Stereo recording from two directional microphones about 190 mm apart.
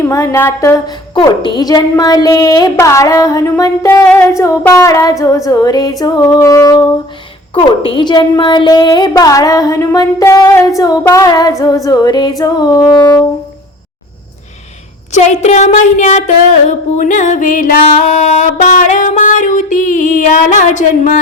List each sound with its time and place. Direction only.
0.0 s a woman's voice: 15° left (ahead or behind)
7.5 s a woman's voice: 30° left (ahead or behind)
15.1 s a sound: 35° left (ahead or behind)